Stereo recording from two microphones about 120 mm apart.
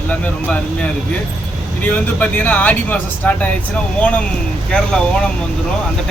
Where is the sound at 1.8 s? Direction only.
15° left (ahead or behind).